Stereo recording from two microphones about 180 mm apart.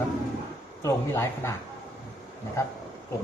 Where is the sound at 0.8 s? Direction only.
15° left (ahead or behind).